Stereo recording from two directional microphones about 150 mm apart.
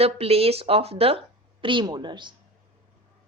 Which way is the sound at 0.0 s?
40° right (ahead or behind).